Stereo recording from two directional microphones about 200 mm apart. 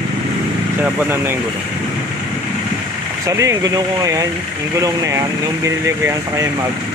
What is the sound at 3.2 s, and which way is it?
Speech, 15° right (ahead or behind).